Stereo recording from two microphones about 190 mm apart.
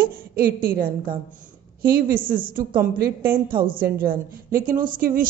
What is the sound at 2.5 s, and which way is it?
A woman's voice, 50° right (ahead or behind).